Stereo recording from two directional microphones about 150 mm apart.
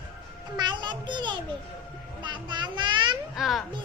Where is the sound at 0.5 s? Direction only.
30° right (ahead or behind).